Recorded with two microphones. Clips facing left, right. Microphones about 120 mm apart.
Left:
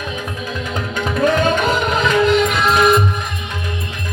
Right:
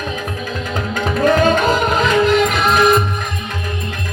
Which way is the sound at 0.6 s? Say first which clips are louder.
Right 2 dB; 40° right (ahead or behind).